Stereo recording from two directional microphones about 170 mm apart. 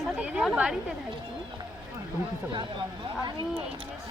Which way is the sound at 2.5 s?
25° right (ahead or behind).